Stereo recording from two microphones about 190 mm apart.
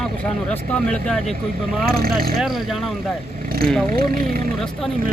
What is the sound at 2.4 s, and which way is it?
Speech, centre (ahead or behind).